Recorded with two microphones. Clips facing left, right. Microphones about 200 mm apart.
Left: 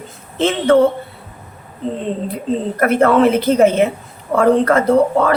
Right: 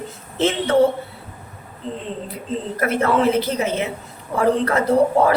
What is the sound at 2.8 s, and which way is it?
A woman's voice, 55° left (ahead or behind).